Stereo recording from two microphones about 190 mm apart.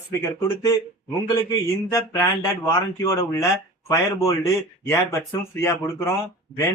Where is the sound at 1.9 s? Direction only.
15° left (ahead or behind).